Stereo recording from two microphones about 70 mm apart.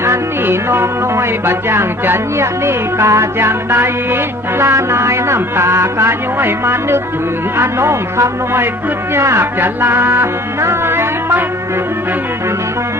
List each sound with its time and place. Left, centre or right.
0.0 s music: right